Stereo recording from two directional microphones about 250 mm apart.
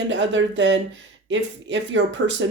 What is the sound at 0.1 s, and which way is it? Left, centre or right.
Speech, right.